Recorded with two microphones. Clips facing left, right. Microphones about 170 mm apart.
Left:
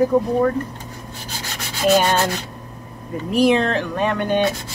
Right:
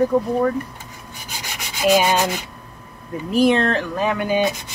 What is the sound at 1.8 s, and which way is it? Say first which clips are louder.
Rub: even; 10° right (ahead or behind).